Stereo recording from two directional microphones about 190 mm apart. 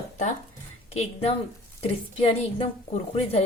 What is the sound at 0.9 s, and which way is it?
A woman's voice, 35° left (ahead or behind).